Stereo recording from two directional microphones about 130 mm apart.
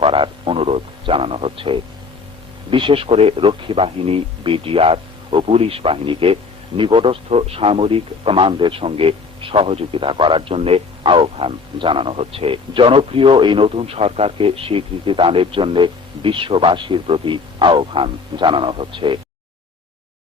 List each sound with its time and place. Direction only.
0.0 s a man's voice: 40° right (ahead or behind)